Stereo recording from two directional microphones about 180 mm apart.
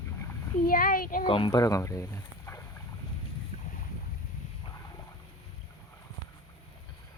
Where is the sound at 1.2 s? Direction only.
30° left (ahead or behind).